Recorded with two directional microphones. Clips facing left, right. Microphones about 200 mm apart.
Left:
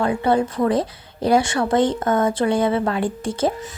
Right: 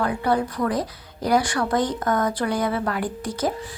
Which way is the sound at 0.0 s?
25° left (ahead or behind).